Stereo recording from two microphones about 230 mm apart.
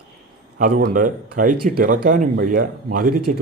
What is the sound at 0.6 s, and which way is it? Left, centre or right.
Speech, right.